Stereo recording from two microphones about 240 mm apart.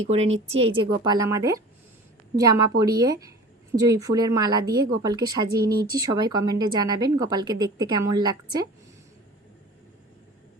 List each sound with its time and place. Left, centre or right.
0.1 s a woman's voice: right